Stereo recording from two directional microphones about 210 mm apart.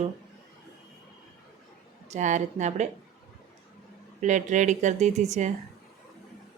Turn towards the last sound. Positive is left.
turn(degrees=-35)  # may be behind; listen again after turning